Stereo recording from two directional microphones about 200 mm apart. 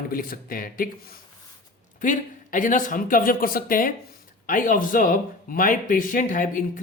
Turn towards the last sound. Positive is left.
turn(degrees=40)  # may be behind; listen again after turning